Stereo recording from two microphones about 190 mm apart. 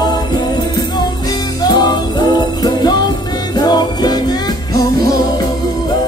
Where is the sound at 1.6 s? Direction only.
20° left (ahead or behind).